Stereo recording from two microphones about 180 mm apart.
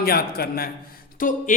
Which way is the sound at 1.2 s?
45° left (ahead or behind).